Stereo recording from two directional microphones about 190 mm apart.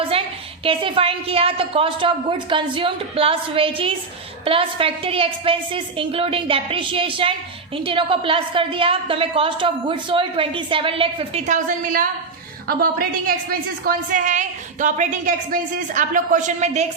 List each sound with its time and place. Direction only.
0.6 s a woman's voice: 30° right (ahead or behind)